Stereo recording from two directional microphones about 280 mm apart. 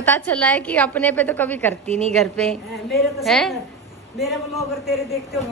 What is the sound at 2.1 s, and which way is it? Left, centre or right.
A woman's voice, centre.